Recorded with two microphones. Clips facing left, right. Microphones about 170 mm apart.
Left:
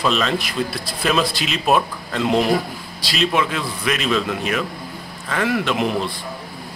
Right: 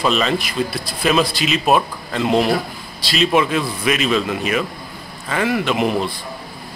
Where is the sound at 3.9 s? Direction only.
5° right (ahead or behind).